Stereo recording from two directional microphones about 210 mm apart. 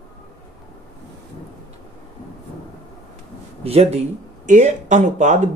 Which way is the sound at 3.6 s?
30° right (ahead or behind).